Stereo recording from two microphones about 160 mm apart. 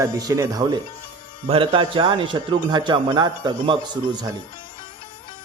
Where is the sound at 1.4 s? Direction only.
35° right (ahead or behind).